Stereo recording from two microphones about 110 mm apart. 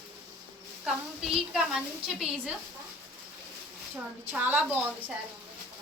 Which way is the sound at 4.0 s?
15° right (ahead or behind).